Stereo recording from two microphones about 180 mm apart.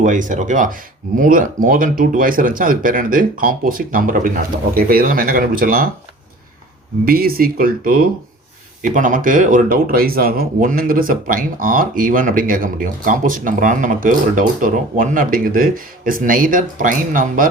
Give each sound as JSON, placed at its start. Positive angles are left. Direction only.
{"t": 0.0, "sound": "speech", "side_deg": -45}
{"t": 7.0, "sound": "speech", "side_deg": -55}